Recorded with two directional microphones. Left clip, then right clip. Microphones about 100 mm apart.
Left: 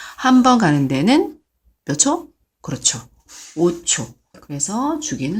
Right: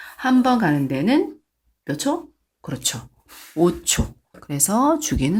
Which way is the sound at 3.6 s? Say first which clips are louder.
Left 1 dB; 30° right (ahead or behind).